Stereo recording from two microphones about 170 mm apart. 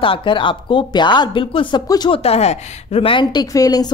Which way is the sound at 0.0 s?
30° left (ahead or behind).